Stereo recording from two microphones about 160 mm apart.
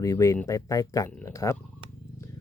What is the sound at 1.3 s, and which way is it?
Speech, 20° left (ahead or behind).